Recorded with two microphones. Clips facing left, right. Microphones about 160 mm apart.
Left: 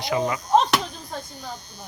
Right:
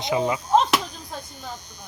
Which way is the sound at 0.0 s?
15° right (ahead or behind).